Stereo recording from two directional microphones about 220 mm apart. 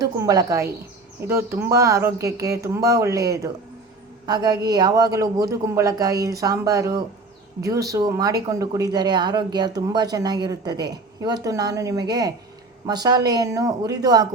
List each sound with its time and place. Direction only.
0.0 s speech: 15° right (ahead or behind)